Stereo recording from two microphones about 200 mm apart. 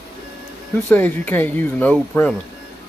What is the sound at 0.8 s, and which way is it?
Speech, 10° left (ahead or behind).